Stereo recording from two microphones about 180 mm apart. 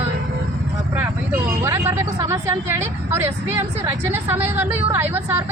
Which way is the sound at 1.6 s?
15° right (ahead or behind).